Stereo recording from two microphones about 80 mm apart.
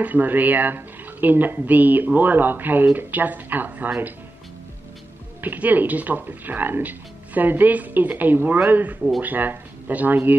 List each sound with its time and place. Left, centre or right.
0.0 s speech: right
5.4 s speech: right